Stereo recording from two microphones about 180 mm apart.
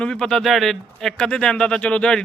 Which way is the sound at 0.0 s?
5° left (ahead or behind).